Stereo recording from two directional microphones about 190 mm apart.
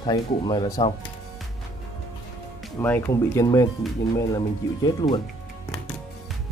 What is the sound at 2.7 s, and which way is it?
Speech, 10° left (ahead or behind).